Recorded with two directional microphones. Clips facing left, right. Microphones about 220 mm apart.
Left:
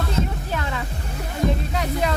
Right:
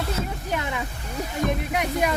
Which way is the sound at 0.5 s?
15° right (ahead or behind).